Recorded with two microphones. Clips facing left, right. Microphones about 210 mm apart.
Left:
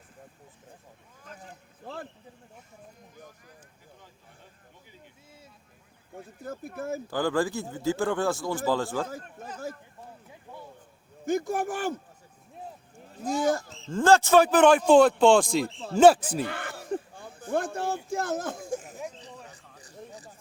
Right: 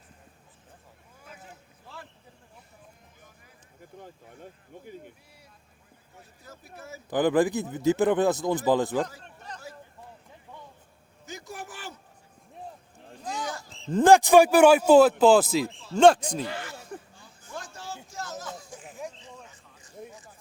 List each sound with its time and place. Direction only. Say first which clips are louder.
1.8 s a sound: left 8 dB; 50° left (ahead or behind)
6.1 s speech: left 12 dB; 50° left (ahead or behind)
7.1 s speech: right 5 dB; 20° right (ahead or behind)
11.3 s speech: left 13 dB; 50° left (ahead or behind)
13.8 s speech: right 3 dB; 15° right (ahead or behind); by 16.4 s 5° left (ahead or behind)
16.4 s a sound: left 2 dB; 55° left (ahead or behind); by 20.3 s 35° left (ahead or behind)